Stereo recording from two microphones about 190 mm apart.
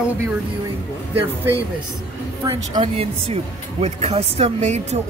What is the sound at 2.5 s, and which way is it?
Speech, 30° right (ahead or behind).